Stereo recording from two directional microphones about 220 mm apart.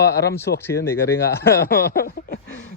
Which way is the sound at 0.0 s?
50° left (ahead or behind).